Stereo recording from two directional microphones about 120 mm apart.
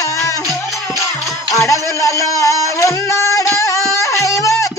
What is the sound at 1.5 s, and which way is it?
Music, 25° left (ahead or behind).